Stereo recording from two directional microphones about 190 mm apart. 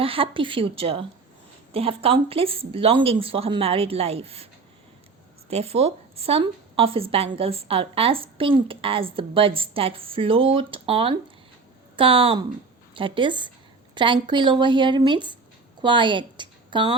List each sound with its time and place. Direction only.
0.0 s a woman's voice: 30° right (ahead or behind)
5.5 s a woman's voice: 30° right (ahead or behind)